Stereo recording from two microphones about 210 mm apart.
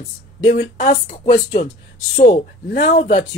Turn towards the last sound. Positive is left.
turn(degrees=35)  # may be behind; listen again after turning